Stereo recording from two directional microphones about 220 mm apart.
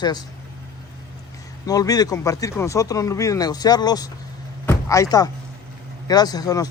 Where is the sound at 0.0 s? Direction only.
20° left (ahead or behind).